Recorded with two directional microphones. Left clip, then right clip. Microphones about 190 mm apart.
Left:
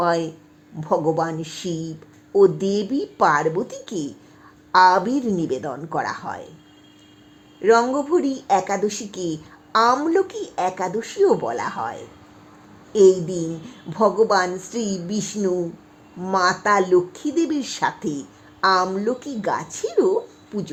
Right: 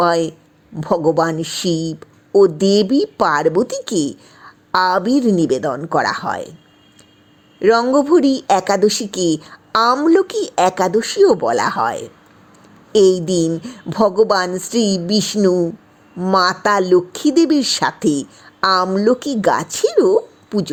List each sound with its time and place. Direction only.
0.0 s speech: 30° right (ahead or behind)
7.6 s a woman's voice: 35° right (ahead or behind)